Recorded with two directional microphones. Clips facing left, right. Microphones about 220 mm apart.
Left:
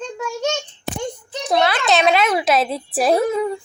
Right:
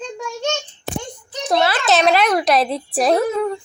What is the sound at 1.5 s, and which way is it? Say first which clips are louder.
Speech: even; centre (ahead or behind).